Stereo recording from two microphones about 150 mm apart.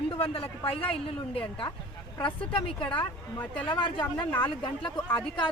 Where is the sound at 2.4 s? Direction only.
35° left (ahead or behind).